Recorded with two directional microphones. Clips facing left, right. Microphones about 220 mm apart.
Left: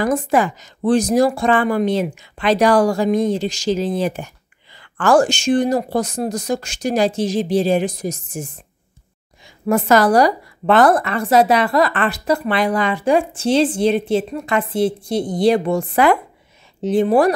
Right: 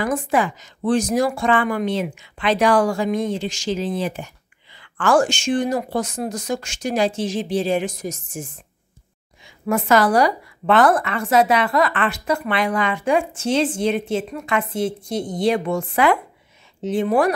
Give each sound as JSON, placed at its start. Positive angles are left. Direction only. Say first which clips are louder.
{"t": 0.0, "sound": "a woman's voice", "louder": "left 3 dB", "side_deg": 40}
{"t": 9.7, "sound": "a woman's voice", "louder": "left 3 dB", "side_deg": 40}